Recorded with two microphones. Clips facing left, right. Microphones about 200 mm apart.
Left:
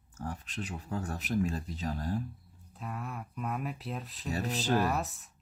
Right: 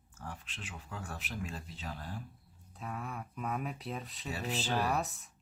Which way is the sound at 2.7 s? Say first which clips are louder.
Left 1 dB; centre (ahead or behind).